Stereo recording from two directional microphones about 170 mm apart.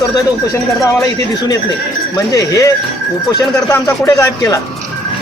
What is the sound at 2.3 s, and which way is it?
Speech, 20° left (ahead or behind).